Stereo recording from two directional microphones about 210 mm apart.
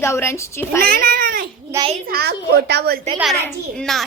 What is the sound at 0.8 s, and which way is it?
A child's voice, 45° right (ahead or behind).